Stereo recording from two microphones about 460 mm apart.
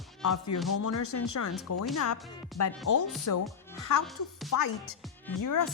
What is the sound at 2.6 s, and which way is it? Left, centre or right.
Speech, left.